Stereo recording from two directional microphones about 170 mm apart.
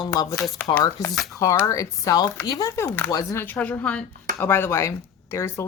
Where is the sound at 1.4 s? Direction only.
20° left (ahead or behind).